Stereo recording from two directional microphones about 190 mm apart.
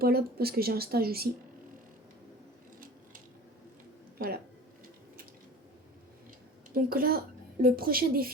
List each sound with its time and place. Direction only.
0.0 s speech: 55° right (ahead or behind)
4.2 s speech: 55° right (ahead or behind)
6.7 s speech: 50° right (ahead or behind)